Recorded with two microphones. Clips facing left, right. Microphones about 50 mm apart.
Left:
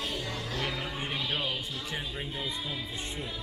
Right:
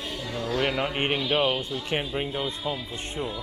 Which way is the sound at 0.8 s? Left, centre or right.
Right.